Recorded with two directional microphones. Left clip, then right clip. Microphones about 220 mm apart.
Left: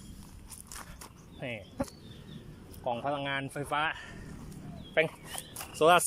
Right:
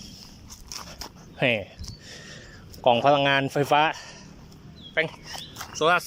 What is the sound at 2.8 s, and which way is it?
Speech, 40° right (ahead or behind).